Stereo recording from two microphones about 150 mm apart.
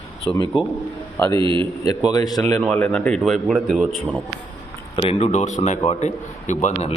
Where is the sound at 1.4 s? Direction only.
35° right (ahead or behind).